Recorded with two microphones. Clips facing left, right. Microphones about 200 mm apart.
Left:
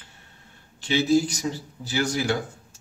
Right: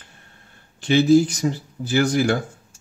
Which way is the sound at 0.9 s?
50° right (ahead or behind).